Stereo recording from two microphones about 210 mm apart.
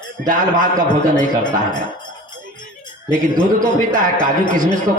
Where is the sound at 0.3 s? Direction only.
40° right (ahead or behind).